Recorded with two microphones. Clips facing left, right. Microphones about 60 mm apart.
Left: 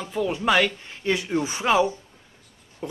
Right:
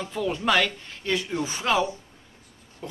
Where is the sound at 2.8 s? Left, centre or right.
Centre.